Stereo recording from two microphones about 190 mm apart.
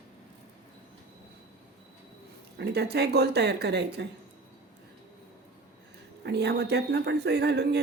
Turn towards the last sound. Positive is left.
turn(degrees=-60)  # may be behind; listen again after turning